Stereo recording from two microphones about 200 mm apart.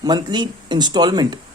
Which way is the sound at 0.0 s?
20° right (ahead or behind).